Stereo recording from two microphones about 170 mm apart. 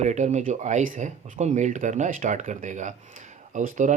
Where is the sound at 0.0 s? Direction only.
45° right (ahead or behind).